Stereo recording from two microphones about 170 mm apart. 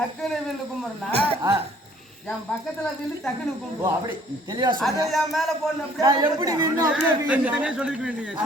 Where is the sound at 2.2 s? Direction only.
5° left (ahead or behind).